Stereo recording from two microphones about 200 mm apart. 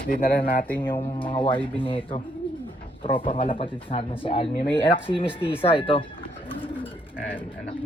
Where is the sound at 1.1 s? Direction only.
25° left (ahead or behind).